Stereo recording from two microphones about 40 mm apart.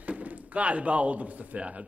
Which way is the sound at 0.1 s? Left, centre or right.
Right.